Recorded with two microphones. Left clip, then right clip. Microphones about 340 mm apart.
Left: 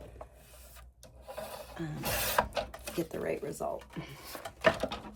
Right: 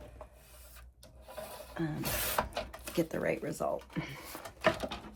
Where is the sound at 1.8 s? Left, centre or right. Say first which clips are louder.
Right 6 dB; centre.